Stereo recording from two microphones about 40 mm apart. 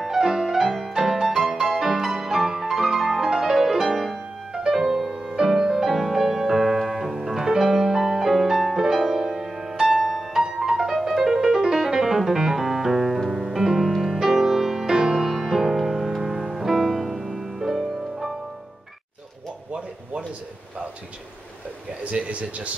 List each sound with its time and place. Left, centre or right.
0.0 s music: centre
3.8 s music: centre
5.9 s piano: centre
8.9 s music: centre
19.7 s a sound: right
22.3 s a sound: right